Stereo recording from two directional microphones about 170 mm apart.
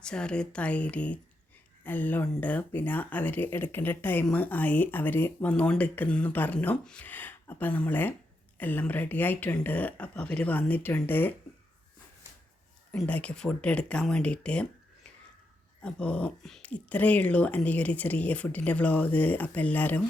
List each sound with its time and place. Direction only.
0.0 s speech: 5° left (ahead or behind)
12.9 s speech: 10° left (ahead or behind)
15.8 s speech: 5° left (ahead or behind)